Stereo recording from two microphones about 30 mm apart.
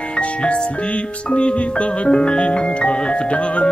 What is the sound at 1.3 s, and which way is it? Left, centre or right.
Music, left.